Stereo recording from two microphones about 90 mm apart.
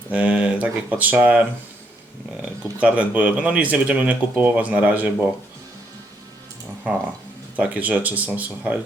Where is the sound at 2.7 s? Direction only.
15° right (ahead or behind).